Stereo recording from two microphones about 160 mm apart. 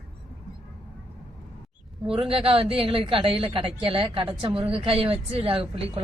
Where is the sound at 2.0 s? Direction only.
35° right (ahead or behind).